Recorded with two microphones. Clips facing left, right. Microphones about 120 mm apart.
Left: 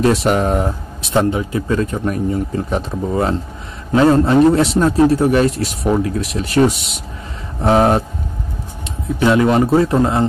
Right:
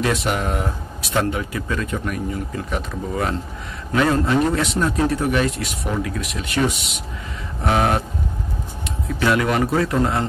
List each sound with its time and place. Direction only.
0.0 s speech: 35° left (ahead or behind)
9.2 s a man's voice: 25° left (ahead or behind)